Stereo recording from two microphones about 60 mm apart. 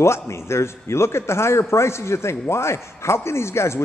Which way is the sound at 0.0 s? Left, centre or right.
Left.